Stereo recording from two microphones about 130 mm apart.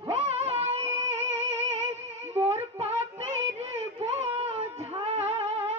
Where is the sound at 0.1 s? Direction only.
50° right (ahead or behind).